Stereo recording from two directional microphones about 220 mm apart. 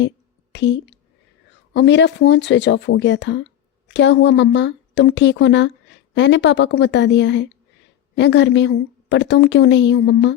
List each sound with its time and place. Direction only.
0.5 s a woman's voice: 55° left (ahead or behind)